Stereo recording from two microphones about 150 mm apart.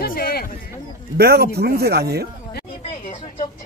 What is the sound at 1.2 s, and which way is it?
Speech, 90° right.